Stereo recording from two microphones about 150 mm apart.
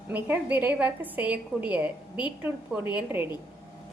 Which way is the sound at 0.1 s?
10° right (ahead or behind).